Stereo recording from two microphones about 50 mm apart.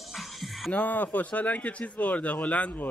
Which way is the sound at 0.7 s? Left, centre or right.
Left.